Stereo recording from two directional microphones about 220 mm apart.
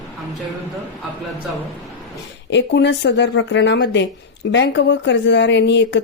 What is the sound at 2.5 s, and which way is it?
A woman's voice, 50° left (ahead or behind).